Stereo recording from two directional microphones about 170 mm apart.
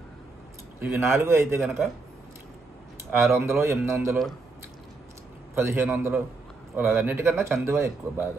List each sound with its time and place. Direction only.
0.7 s speech: 15° right (ahead or behind)
3.1 s speech: 15° right (ahead or behind)
5.5 s a man's voice: 15° right (ahead or behind)